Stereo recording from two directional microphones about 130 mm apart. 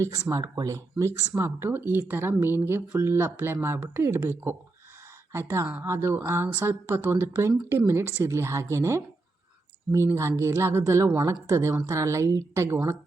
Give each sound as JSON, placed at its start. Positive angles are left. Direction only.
{"t": 0.3, "sound": "a woman's voice", "side_deg": -25}